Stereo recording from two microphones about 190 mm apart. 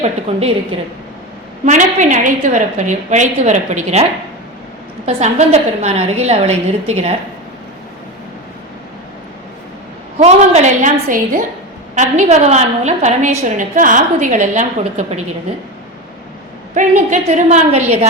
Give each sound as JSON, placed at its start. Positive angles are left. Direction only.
{"t": 0.0, "sound": "a woman's voice", "side_deg": -30}
{"t": 1.6, "sound": "a woman's voice", "side_deg": -40}
{"t": 5.0, "sound": "a woman's voice", "side_deg": -35}
{"t": 10.2, "sound": "a woman's voice", "side_deg": -35}
{"t": 16.7, "sound": "a woman's voice", "side_deg": -40}